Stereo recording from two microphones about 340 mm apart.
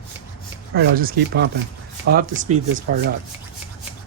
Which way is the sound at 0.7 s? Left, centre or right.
Right.